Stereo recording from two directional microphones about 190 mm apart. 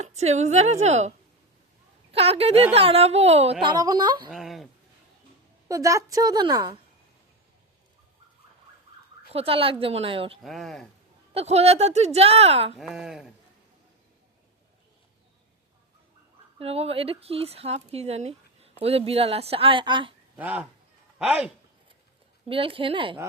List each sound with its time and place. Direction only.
0.0 s speech: 35° right (ahead or behind)
2.1 s speech: 30° right (ahead or behind)
3.6 s a woman's voice: 20° right (ahead or behind)
4.3 s speech: centre (ahead or behind)
5.6 s a woman's voice: 15° right (ahead or behind)
9.3 s a woman's voice: 30° right (ahead or behind)
10.4 s speech: centre (ahead or behind)
11.3 s speech: 35° right (ahead or behind)
12.8 s speech: 5° right (ahead or behind)
16.6 s speech: 30° right (ahead or behind)
20.4 s speech: 10° right (ahead or behind)
22.4 s a woman's voice: 30° right (ahead or behind)